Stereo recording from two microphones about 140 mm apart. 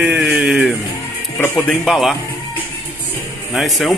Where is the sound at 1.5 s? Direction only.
Centre (ahead or behind).